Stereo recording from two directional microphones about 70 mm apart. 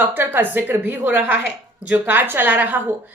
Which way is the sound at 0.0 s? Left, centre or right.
Right.